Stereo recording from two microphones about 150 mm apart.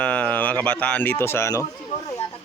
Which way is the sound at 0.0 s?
10° left (ahead or behind).